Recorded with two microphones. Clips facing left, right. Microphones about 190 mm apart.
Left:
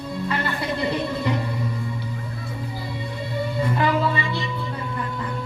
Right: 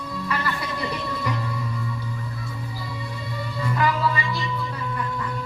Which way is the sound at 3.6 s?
25° left (ahead or behind).